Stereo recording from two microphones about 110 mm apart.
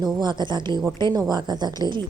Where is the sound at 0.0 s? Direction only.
40° right (ahead or behind).